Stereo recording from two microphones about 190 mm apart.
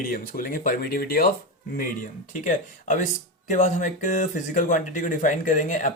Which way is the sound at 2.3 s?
45° left (ahead or behind).